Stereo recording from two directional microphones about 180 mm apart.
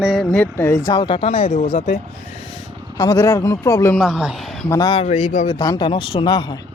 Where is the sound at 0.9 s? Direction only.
25° left (ahead or behind).